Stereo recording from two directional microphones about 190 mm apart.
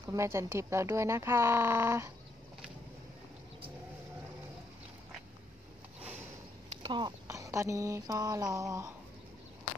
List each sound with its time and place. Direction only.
0.0 s speech: 15° right (ahead or behind)
5.9 s sniff: 10° right (ahead or behind)
6.8 s speech: 25° right (ahead or behind)